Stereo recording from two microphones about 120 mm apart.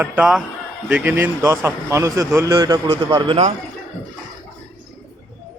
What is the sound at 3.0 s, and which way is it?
Speech, 45° right (ahead or behind).